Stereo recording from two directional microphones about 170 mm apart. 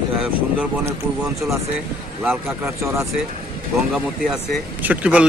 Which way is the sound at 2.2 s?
10° right (ahead or behind).